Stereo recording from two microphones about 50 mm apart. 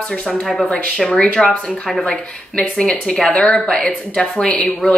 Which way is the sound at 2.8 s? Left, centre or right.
Centre.